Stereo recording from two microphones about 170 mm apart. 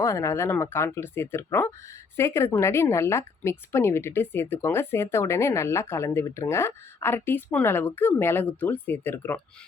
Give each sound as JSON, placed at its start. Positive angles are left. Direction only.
{"t": 0.0, "sound": "speech", "side_deg": 15}